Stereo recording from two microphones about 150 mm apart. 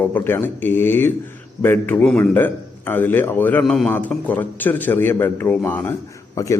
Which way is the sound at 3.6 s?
Centre (ahead or behind).